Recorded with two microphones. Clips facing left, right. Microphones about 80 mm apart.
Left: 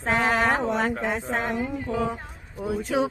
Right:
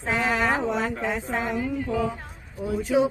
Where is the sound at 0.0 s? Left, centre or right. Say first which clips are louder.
Left 2 dB; left.